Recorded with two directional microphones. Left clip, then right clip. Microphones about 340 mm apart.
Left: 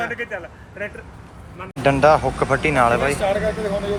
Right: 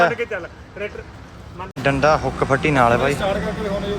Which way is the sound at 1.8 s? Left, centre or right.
Centre.